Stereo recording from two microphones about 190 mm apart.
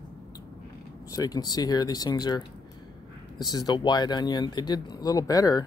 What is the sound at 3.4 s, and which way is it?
Speech, 20° left (ahead or behind).